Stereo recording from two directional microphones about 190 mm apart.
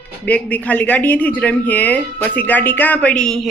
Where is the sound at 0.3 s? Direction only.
10° left (ahead or behind).